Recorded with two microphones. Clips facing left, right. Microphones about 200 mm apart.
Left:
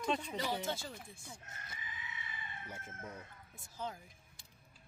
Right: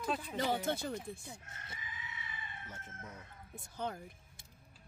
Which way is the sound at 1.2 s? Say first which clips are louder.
Right 2 dB; 20° right (ahead or behind).